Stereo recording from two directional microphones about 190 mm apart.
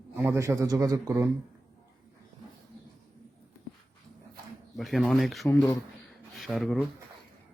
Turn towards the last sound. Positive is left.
turn(degrees=0)  # may be behind; listen again after turning